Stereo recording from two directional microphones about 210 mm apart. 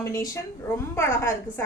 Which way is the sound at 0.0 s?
15° left (ahead or behind).